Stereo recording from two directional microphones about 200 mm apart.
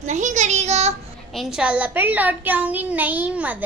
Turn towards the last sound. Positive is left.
turn(degrees=-5)  # may be behind; listen again after turning